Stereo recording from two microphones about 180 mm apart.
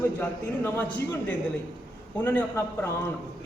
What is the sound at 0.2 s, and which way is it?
Speech, 15° left (ahead or behind).